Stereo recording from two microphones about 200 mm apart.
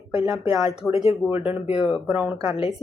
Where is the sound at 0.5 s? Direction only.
15° right (ahead or behind).